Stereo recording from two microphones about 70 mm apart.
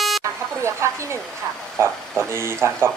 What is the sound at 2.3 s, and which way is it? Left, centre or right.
Speech, right.